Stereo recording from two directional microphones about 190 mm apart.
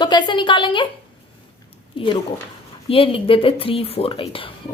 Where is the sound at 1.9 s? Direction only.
25° left (ahead or behind).